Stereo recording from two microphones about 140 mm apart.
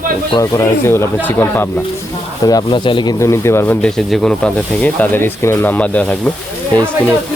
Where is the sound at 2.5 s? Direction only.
30° left (ahead or behind).